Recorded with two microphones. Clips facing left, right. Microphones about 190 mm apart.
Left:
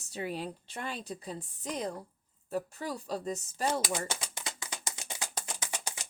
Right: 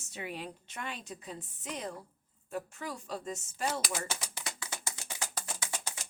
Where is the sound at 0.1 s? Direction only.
35° left (ahead or behind).